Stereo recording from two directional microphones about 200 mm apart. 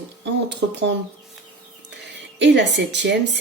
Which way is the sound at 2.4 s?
60° right (ahead or behind).